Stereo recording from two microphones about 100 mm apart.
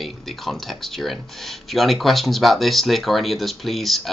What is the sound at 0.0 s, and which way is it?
Speech, centre (ahead or behind).